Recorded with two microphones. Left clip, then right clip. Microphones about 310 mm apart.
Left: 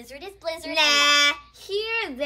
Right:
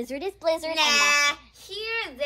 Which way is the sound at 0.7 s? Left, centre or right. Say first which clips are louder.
Left 4 dB; left.